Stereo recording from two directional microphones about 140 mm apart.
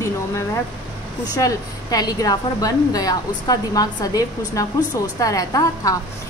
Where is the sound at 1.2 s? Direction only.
25° left (ahead or behind).